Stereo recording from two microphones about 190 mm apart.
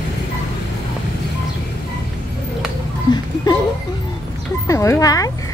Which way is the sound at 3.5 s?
20° left (ahead or behind).